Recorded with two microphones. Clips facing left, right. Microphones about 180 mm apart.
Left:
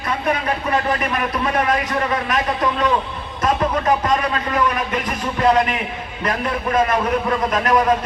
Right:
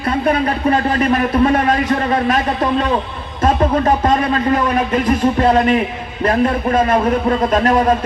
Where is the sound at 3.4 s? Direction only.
30° right (ahead or behind).